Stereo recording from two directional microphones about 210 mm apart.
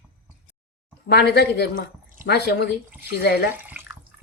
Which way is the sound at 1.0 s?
50° left (ahead or behind).